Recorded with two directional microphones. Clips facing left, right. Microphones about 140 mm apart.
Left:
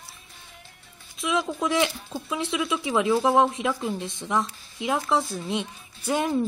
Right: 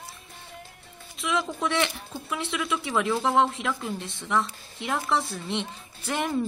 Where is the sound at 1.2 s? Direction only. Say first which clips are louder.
Left 2 dB; 15° left (ahead or behind).